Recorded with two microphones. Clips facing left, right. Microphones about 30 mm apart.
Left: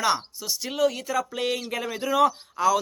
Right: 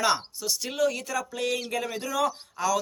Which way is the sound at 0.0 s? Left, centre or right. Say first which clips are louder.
Left 1 dB; centre.